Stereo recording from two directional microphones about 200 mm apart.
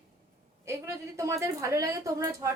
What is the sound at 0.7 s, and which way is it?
A woman's voice, 15° right (ahead or behind).